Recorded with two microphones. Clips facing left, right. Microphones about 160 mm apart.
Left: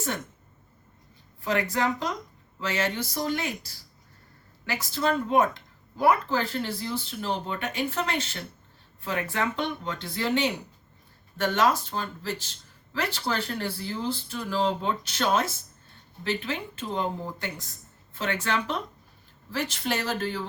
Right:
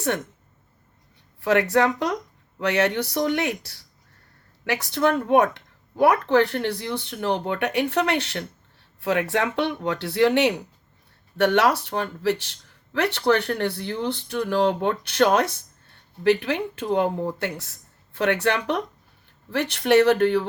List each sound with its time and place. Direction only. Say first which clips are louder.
1.4 s speech: right 7 dB; 70° right (ahead or behind)